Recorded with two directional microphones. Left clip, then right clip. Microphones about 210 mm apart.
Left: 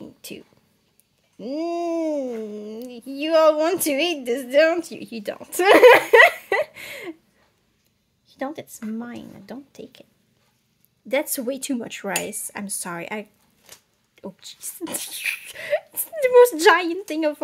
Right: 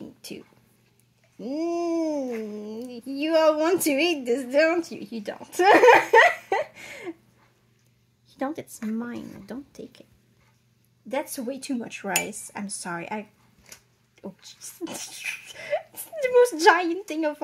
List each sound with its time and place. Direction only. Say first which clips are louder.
0.0 s a sound: left 2 dB; 10° left (ahead or behind)
1.4 s a woman's voice: left 2 dB; 10° left (ahead or behind)
8.3 s a woman's voice: even; centre (ahead or behind)
11.1 s a woman's voice: left 6 dB; 30° left (ahead or behind)